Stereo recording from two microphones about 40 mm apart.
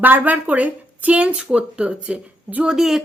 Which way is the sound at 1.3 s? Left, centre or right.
Right.